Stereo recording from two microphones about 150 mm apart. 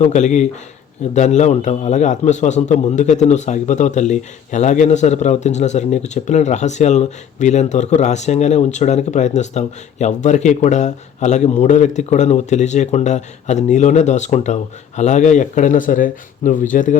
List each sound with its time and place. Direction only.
0.0 s a man's voice: 55° left (ahead or behind)